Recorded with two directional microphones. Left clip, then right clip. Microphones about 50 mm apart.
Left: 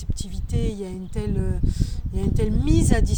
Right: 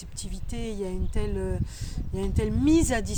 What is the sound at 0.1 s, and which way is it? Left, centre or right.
Speech, right.